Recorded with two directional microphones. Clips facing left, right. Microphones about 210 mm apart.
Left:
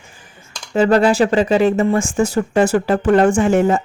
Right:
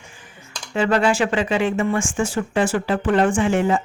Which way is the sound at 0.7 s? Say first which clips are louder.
Left 5 dB; 40° left (ahead or behind).